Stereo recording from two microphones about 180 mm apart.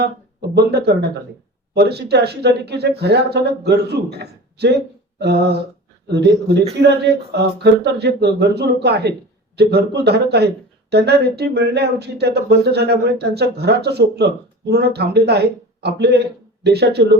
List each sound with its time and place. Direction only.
0.5 s speech: 65° right (ahead or behind)